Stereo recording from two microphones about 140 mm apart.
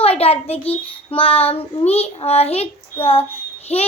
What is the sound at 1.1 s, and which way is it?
A child's voice, 45° left (ahead or behind).